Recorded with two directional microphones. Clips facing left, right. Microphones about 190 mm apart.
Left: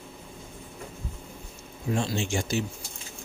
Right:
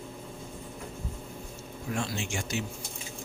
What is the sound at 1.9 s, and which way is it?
Speech, 25° left (ahead or behind).